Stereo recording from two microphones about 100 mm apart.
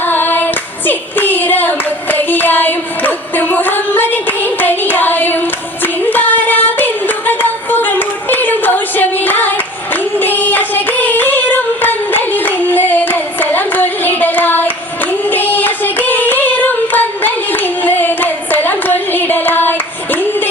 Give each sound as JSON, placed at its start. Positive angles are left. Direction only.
{"t": 0.0, "sound": "clapping", "side_deg": 20}
{"t": 15.2, "sound": "singing", "side_deg": 20}